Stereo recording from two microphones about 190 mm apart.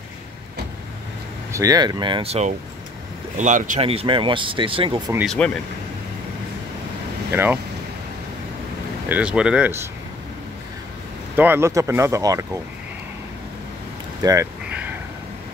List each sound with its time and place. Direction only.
1.5 s speech: 20° right (ahead or behind); by 3.8 s 40° right (ahead or behind)
3.8 s speech: 30° right (ahead or behind)
5.2 s speech: 5° left (ahead or behind)
9.1 s speech: 5° right (ahead or behind)
11.3 s speech: 10° right (ahead or behind)
14.2 s a sound: 15° right (ahead or behind)